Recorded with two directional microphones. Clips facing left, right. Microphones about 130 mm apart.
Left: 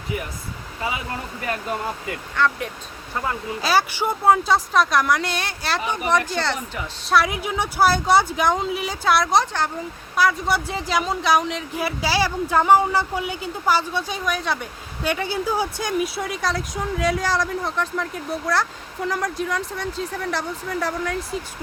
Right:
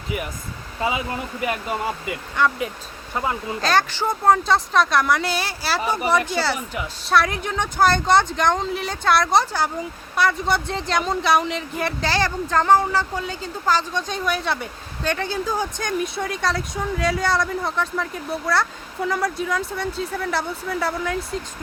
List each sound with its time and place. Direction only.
0.8 s speech: 25° right (ahead or behind)
3.6 s speech: 5° left (ahead or behind)
5.8 s speech: 35° right (ahead or behind)
6.1 s speech: 5° right (ahead or behind)
15.0 s speech: 10° left (ahead or behind)